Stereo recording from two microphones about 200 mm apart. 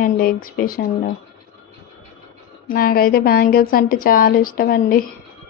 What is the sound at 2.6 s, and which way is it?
Speech, 45° left (ahead or behind).